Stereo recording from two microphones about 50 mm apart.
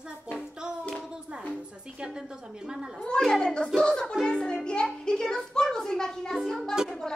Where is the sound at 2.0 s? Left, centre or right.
Centre.